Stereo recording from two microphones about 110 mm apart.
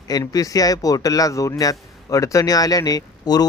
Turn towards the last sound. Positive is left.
turn(degrees=35)  # may be behind; listen again after turning